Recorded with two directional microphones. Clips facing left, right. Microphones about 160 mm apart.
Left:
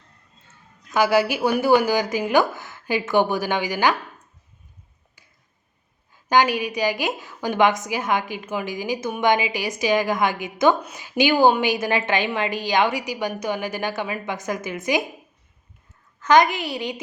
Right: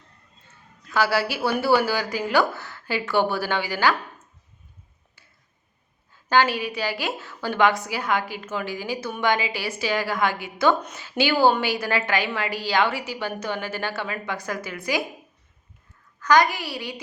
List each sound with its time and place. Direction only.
0.9 s a woman's voice: 15° left (ahead or behind)
6.2 s a woman's voice: 15° left (ahead or behind)
16.2 s a woman's voice: 20° left (ahead or behind)